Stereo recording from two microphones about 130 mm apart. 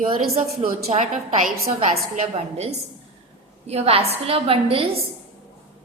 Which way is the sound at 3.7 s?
50° right (ahead or behind).